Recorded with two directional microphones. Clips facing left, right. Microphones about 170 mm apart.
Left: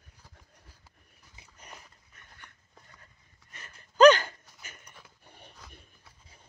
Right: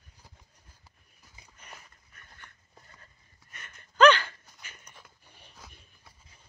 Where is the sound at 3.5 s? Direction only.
30° left (ahead or behind).